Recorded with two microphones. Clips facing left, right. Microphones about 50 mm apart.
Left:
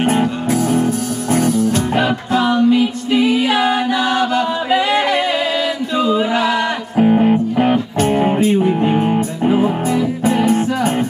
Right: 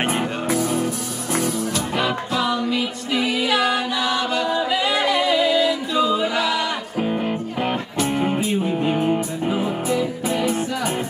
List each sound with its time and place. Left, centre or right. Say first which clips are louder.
0.1 s music: left 6 dB; left
4.6 s a capella: left 5 dB; left
7.0 s music: left 12 dB; left
8.9 s music: left 4 dB; left